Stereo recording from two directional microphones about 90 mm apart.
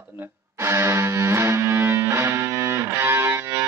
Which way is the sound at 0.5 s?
30° right (ahead or behind).